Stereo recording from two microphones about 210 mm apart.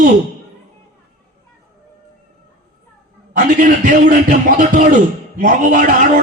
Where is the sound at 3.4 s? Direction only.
40° right (ahead or behind).